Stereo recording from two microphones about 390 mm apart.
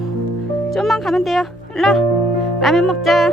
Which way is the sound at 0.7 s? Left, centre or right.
Centre.